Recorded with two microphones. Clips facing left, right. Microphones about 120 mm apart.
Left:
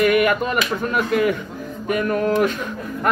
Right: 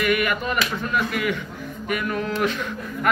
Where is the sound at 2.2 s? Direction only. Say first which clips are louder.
Left 5 dB; 45° left (ahead or behind).